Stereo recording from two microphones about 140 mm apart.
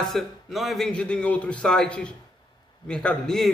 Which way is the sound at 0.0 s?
Centre (ahead or behind).